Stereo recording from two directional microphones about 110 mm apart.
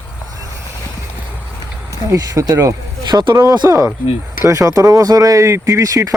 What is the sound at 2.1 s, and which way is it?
Speech, 35° right (ahead or behind).